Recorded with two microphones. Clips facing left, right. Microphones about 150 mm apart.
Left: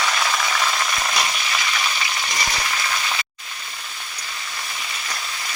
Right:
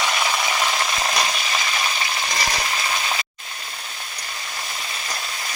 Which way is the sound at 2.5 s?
25° right (ahead or behind).